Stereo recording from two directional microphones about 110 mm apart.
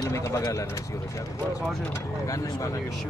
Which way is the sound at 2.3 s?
30° left (ahead or behind).